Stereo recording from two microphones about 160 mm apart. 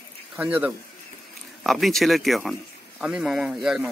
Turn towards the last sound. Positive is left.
turn(degrees=0)  # may be behind; listen again after turning